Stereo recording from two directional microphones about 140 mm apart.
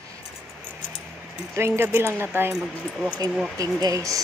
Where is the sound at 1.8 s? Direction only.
15° right (ahead or behind).